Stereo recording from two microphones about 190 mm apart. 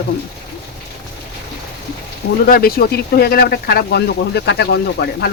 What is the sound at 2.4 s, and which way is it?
Speech, 50° left (ahead or behind).